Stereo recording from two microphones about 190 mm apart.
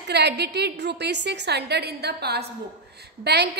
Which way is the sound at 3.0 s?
60° right (ahead or behind).